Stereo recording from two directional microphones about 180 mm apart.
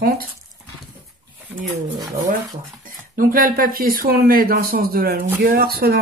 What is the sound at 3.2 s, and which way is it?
Speech, 50° right (ahead or behind).